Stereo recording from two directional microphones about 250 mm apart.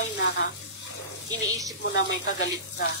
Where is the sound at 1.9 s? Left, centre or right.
Left.